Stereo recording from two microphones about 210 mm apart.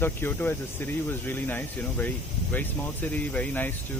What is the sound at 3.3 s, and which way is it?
Speech, 5° left (ahead or behind).